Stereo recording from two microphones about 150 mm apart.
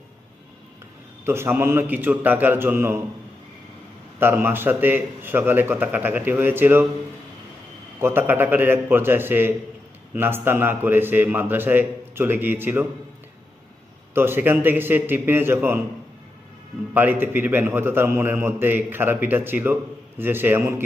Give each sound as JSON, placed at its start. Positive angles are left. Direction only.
{"t": 1.2, "sound": "a man's voice", "side_deg": -15}
{"t": 4.2, "sound": "a man's voice", "side_deg": -15}
{"t": 8.0, "sound": "a man's voice", "side_deg": -15}
{"t": 14.1, "sound": "a man's voice", "side_deg": -15}
{"t": 16.9, "sound": "a man's voice", "side_deg": -15}